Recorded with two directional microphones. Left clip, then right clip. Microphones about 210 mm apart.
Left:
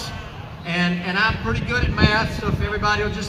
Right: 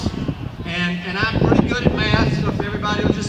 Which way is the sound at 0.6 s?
15° left (ahead or behind).